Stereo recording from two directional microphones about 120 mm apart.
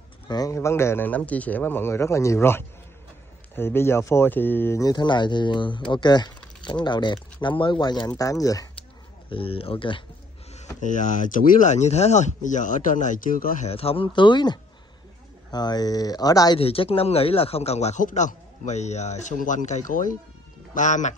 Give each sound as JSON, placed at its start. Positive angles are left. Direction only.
{"t": 0.3, "sound": "speech", "side_deg": 30}
{"t": 4.8, "sound": "speech", "side_deg": 40}
{"t": 9.3, "sound": "speech", "side_deg": 50}
{"t": 10.8, "sound": "speech", "side_deg": 90}
{"t": 13.7, "sound": "speech", "side_deg": 50}
{"t": 16.5, "sound": "speech", "side_deg": 50}